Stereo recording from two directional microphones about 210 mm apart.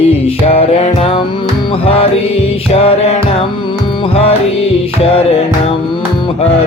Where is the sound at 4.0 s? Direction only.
25° left (ahead or behind).